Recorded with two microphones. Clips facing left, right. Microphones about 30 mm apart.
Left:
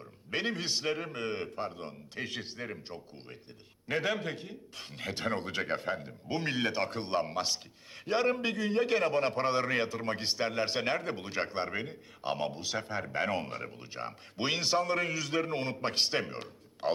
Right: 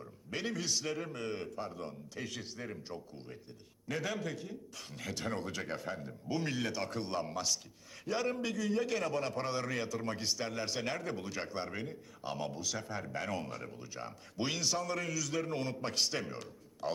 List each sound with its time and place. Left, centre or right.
0.3 s a man's voice: left